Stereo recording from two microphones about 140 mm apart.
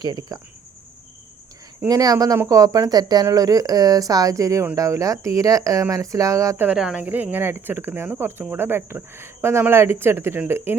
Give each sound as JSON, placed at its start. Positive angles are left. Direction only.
{"t": 0.0, "sound": "speech", "side_deg": -30}
{"t": 1.9, "sound": "speech", "side_deg": -25}
{"t": 6.7, "sound": "speech", "side_deg": -5}